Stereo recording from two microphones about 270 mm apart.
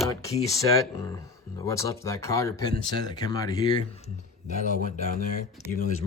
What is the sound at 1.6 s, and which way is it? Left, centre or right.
Speech, centre.